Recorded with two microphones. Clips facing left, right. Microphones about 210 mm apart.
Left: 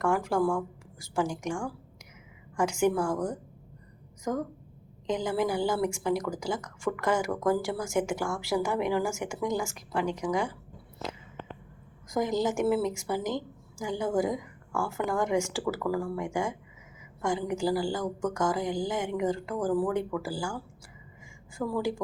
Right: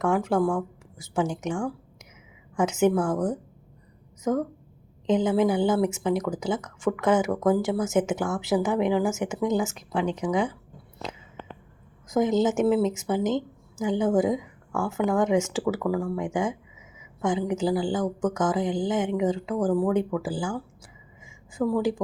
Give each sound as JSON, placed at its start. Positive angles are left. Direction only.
{"t": 0.0, "sound": "speech", "side_deg": -20}
{"t": 2.6, "sound": "speech", "side_deg": -20}
{"t": 3.1, "sound": "speech", "side_deg": -5}
{"t": 5.0, "sound": "speech", "side_deg": -20}
{"t": 12.1, "sound": "speech", "side_deg": -20}
{"t": 18.0, "sound": "speech", "side_deg": 0}
{"t": 18.3, "sound": "a woman's voice", "side_deg": -20}